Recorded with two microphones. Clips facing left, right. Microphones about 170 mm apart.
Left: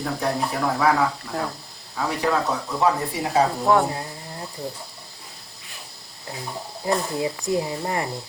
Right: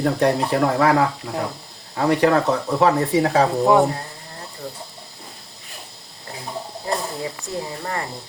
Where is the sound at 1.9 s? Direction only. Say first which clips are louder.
Right 7 dB; 65° right (ahead or behind).